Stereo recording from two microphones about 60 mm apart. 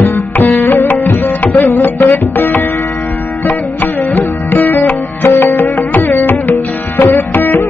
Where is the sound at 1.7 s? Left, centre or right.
Left.